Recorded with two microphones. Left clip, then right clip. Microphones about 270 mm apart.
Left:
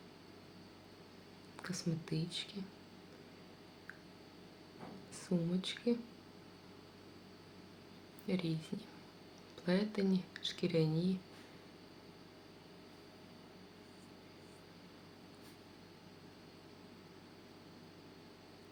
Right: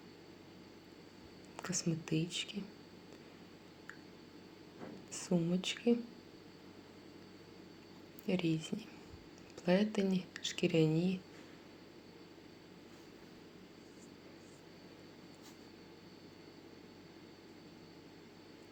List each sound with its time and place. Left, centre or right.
1.5 s speech: centre
5.1 s speech: centre
8.3 s speech: centre
9.6 s speech: centre
10.8 s speech: centre